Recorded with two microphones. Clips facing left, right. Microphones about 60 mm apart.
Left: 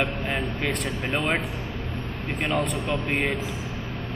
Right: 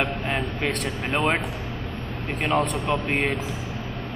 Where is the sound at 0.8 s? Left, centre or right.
Centre.